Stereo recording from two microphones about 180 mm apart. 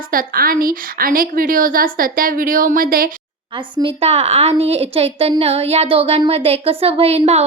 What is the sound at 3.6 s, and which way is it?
A woman's voice, 25° right (ahead or behind).